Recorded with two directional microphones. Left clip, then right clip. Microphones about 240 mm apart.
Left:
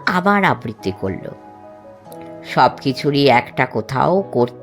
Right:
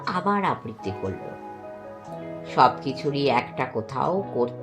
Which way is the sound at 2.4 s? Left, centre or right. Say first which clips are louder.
Left 5 dB; left.